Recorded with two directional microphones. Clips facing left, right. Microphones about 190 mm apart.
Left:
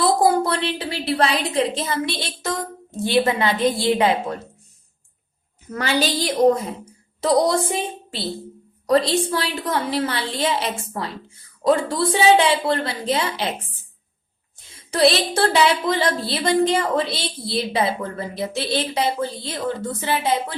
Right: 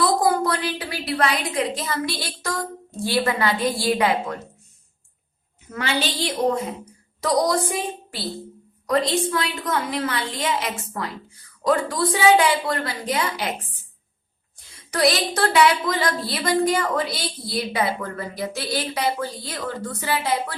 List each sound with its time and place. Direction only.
0.0 s a woman's voice: 30° left (ahead or behind)
5.7 s a woman's voice: 40° left (ahead or behind)
7.2 s a woman's voice: 25° left (ahead or behind)